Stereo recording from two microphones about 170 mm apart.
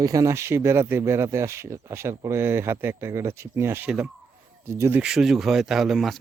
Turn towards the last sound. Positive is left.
turn(degrees=0)  # may be behind; listen again after turning